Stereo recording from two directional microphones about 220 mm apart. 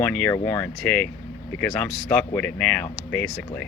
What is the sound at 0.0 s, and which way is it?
Speech, 5° left (ahead or behind).